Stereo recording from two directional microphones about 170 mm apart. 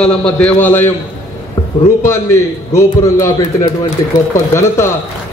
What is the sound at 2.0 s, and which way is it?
A man's voice, 15° left (ahead or behind).